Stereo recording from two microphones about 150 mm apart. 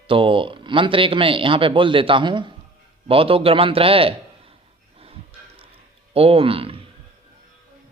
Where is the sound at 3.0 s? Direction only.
40° right (ahead or behind).